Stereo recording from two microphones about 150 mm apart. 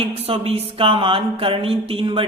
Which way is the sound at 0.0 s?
40° right (ahead or behind).